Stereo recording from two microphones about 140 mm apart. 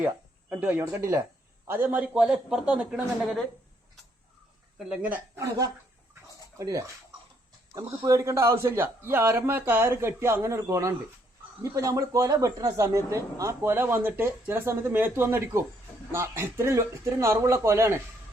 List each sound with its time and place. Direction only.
0.5 s a man's voice: 10° right (ahead or behind)
4.8 s a man's voice: 10° right (ahead or behind)
5.4 s a man's voice: 25° right (ahead or behind)